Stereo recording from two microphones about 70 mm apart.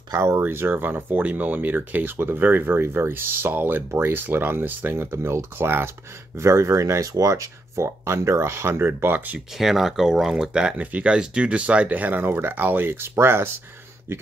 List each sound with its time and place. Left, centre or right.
0.1 s speech: right
6.3 s speech: right
9.6 s speech: centre; by 13.5 s right